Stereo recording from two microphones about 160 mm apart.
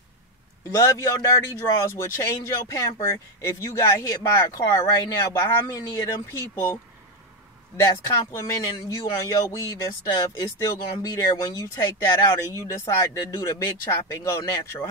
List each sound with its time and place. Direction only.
0.7 s a man's voice: 20° left (ahead or behind)